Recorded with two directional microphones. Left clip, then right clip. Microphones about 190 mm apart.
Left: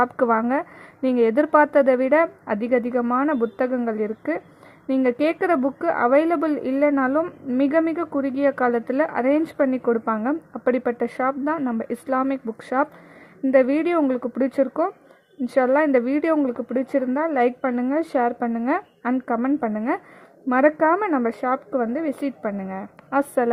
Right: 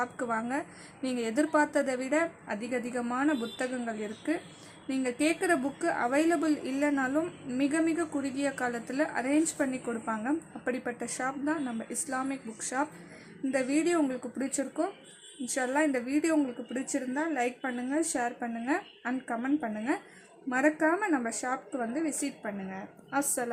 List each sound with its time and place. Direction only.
0.0 s a woman's voice: 40° left (ahead or behind)